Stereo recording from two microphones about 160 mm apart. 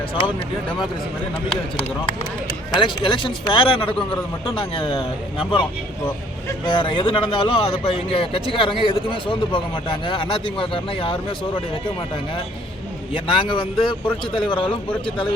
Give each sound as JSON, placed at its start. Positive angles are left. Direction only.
{"t": 2.7, "sound": "speech", "side_deg": 30}
{"t": 6.7, "sound": "speech", "side_deg": 30}
{"t": 13.1, "sound": "speech", "side_deg": 30}